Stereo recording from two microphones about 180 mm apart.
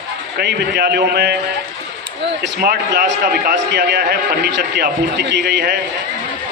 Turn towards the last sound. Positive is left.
turn(degrees=-60)  # may be behind; listen again after turning